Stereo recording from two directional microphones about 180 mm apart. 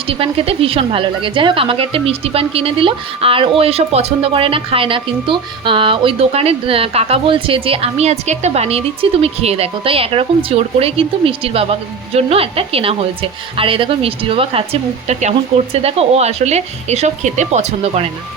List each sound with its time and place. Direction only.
0.1 s a woman's voice: 30° right (ahead or behind)